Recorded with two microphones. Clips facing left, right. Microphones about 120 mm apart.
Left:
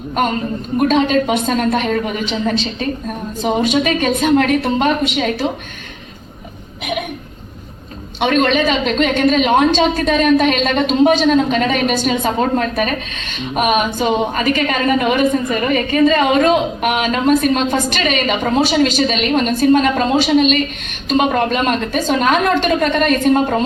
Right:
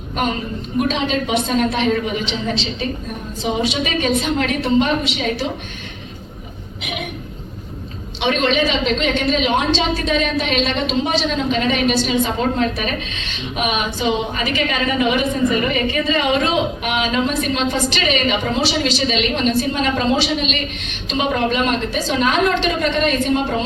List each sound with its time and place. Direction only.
0.8 s a woman's voice: 45° left (ahead or behind)
8.2 s a woman's voice: 45° left (ahead or behind)